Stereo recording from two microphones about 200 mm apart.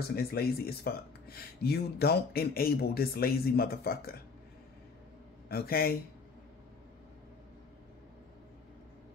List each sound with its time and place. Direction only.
0.1 s speech: 50° left (ahead or behind)
5.5 s speech: 50° left (ahead or behind)